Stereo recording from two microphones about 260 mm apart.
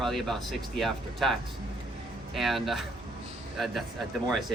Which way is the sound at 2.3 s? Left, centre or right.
Centre.